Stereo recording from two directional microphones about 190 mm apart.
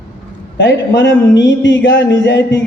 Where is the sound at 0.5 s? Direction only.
75° left (ahead or behind).